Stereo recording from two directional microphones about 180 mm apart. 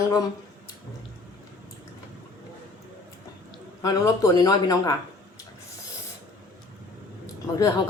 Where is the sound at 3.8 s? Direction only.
20° left (ahead or behind).